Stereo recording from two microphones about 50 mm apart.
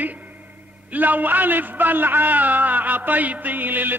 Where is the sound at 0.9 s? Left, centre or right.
Right.